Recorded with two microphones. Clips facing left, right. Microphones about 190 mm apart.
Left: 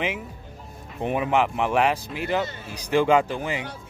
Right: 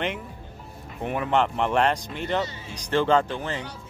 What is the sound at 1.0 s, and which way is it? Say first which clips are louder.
Speech: left 1 dB; 15° left (ahead or behind).